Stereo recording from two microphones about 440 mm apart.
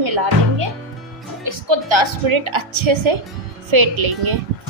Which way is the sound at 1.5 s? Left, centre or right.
Right.